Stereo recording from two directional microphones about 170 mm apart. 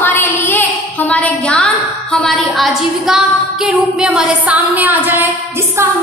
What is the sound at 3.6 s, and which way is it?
A woman's voice, 5° right (ahead or behind).